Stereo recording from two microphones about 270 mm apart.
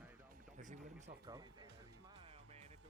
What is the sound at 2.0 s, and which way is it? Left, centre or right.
Music, centre.